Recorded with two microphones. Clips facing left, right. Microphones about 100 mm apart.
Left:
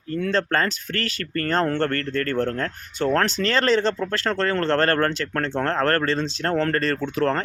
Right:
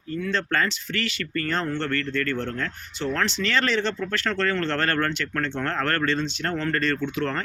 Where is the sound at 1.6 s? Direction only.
50° left (ahead or behind).